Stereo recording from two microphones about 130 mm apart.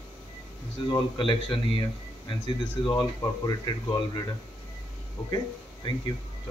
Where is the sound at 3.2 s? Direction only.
30° left (ahead or behind).